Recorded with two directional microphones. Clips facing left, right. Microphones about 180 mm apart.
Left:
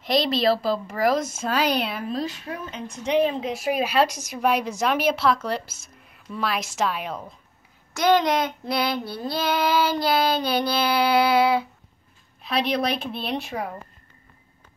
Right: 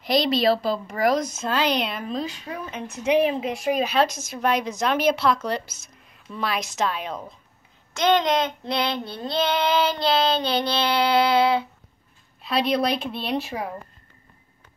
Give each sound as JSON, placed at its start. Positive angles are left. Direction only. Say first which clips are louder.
{"t": 0.0, "sound": "a woman's voice", "louder": "right 1 dB", "side_deg": 0}
{"t": 2.6, "sound": "a woman's voice", "louder": "right 6 dB", "side_deg": -5}
{"t": 7.9, "sound": "child singing", "louder": "left 1 dB", "side_deg": -20}
{"t": 12.4, "sound": "a woman's voice", "louder": "right 2 dB", "side_deg": 0}